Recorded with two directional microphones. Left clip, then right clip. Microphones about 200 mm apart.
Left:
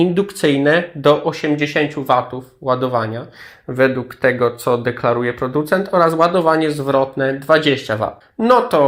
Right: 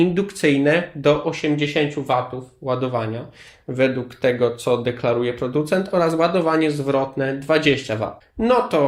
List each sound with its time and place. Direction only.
0.4 s speech: 15° left (ahead or behind)